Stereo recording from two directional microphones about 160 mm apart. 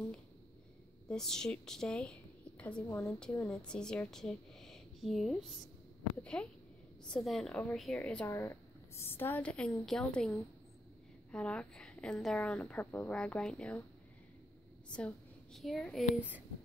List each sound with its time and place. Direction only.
1.0 s a woman's voice: 5° left (ahead or behind)
14.9 s a woman's voice: 5° left (ahead or behind)